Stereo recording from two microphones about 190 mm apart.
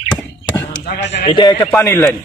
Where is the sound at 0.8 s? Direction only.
40° left (ahead or behind); by 1.6 s 20° left (ahead or behind).